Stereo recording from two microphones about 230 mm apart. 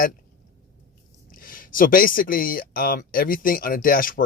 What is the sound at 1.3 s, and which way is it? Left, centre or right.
Speech, left.